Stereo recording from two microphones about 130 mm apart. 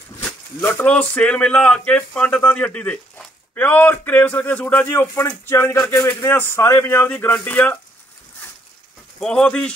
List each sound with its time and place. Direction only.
0.2 s speech: 15° left (ahead or behind)
9.2 s speech: 5° left (ahead or behind)